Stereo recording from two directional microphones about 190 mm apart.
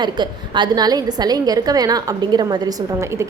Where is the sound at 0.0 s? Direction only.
25° right (ahead or behind).